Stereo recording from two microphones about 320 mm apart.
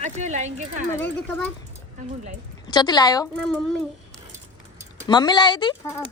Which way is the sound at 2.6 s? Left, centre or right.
Centre.